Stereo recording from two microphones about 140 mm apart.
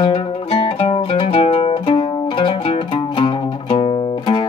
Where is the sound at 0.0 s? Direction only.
45° left (ahead or behind).